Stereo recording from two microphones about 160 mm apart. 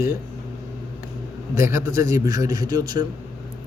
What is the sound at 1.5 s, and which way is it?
A man's voice, 15° right (ahead or behind).